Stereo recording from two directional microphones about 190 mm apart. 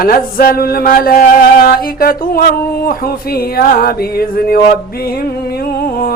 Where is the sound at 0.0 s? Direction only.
50° left (ahead or behind).